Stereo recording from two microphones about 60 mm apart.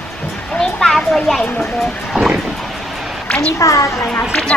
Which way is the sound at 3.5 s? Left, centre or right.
Left.